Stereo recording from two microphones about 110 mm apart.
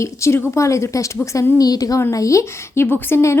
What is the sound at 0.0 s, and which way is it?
A woman's voice, 25° left (ahead or behind).